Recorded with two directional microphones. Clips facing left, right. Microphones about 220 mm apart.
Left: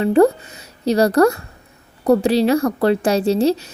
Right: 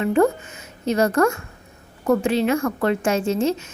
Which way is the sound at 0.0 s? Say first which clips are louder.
Left 5 dB; 35° left (ahead or behind).